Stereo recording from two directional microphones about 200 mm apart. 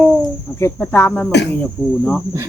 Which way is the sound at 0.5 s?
10° left (ahead or behind).